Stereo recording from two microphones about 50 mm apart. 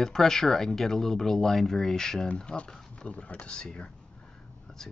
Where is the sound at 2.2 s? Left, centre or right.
Left.